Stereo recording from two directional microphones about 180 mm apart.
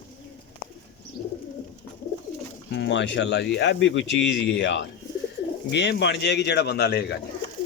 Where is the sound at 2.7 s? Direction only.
75° left (ahead or behind).